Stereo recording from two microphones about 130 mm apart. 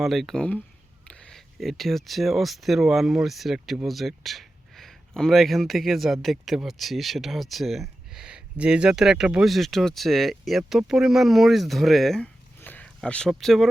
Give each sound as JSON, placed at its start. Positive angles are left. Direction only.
{"t": 0.0, "sound": "speech", "side_deg": 0}